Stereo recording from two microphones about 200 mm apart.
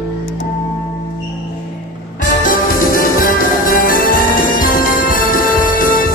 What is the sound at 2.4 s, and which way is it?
Music, 45° left (ahead or behind).